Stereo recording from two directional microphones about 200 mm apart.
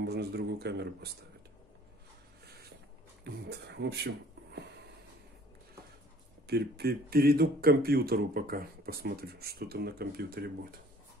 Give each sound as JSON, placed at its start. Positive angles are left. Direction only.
{"t": 0.0, "sound": "speech", "side_deg": -55}
{"t": 3.4, "sound": "speech", "side_deg": -55}
{"t": 6.4, "sound": "speech", "side_deg": -55}